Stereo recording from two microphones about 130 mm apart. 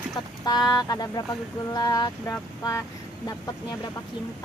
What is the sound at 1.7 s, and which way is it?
Boat, 30° left (ahead or behind).